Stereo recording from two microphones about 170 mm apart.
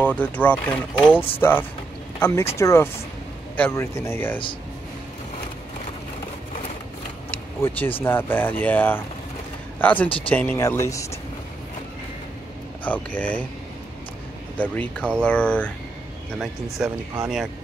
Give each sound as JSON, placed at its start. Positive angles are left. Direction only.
{"t": 0.0, "sound": "speech", "side_deg": 10}
{"t": 7.2, "sound": "vehicle", "side_deg": 10}
{"t": 8.0, "sound": "speech", "side_deg": 10}
{"t": 10.0, "sound": "speech", "side_deg": 30}
{"t": 10.3, "sound": "speech", "side_deg": 10}
{"t": 12.8, "sound": "speech", "side_deg": 10}
{"t": 14.6, "sound": "speech", "side_deg": 10}